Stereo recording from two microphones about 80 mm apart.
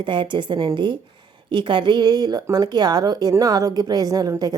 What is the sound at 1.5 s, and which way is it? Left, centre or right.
Speech, right.